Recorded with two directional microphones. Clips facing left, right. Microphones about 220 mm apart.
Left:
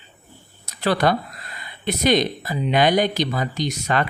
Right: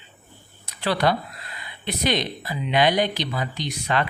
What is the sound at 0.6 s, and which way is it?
Speech, 45° left (ahead or behind).